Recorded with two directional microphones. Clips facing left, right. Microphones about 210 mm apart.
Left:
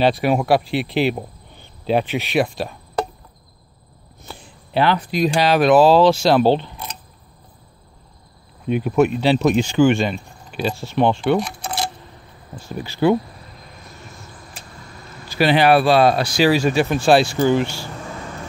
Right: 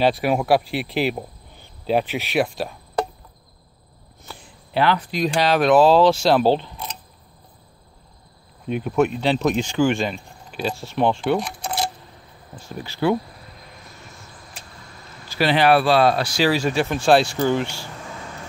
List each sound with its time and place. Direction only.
0.0 s speech: 5° right (ahead or behind)
4.3 s a sound: 25° left (ahead or behind)
5.1 s speech: 10° left (ahead or behind)
8.6 s speech: 5° left (ahead or behind)
13.0 s speech: 20° left (ahead or behind)
15.2 s speech: 15° left (ahead or behind)